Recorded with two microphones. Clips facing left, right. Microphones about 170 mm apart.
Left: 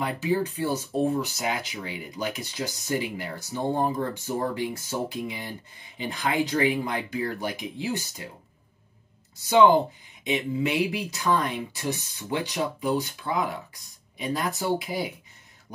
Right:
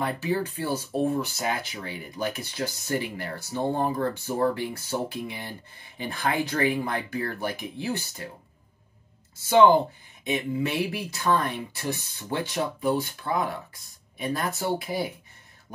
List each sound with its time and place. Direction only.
0.0 s speech: 15° left (ahead or behind)
9.5 s speech: 15° left (ahead or behind)